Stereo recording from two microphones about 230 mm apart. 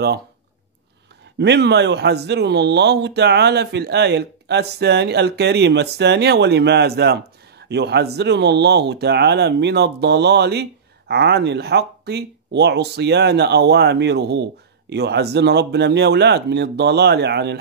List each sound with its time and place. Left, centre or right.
1.4 s speech: right